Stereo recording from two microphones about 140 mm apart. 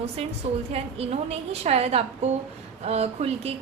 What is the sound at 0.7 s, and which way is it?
A woman's voice, 45° right (ahead or behind).